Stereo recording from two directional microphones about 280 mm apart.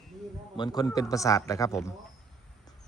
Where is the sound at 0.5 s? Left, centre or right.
Centre.